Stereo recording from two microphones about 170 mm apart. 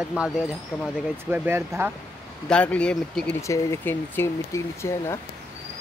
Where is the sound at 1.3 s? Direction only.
10° right (ahead or behind).